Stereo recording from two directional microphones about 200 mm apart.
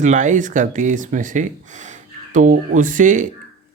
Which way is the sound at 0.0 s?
40° right (ahead or behind).